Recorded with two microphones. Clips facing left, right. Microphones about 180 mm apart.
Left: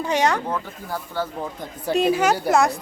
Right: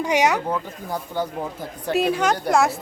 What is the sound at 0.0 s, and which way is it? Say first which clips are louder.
Speech: right 1 dB; 10° right (ahead or behind).